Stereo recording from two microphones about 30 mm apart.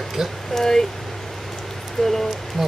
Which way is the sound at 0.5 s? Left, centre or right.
Centre.